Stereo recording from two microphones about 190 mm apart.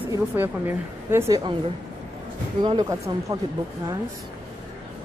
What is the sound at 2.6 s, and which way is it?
Speech, 20° right (ahead or behind).